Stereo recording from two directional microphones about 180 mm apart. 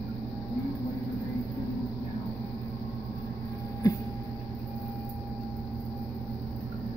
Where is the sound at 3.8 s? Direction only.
20° left (ahead or behind).